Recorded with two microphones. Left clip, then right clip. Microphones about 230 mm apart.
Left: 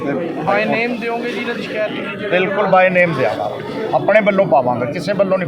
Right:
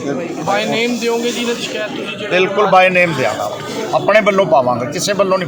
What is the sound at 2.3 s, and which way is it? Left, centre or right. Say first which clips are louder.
A man's voice: right 2 dB; centre.